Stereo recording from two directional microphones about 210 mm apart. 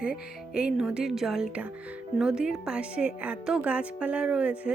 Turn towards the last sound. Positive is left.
turn(degrees=-5)  # may be behind; listen again after turning